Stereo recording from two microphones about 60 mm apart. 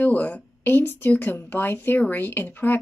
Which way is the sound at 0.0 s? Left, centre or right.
Left.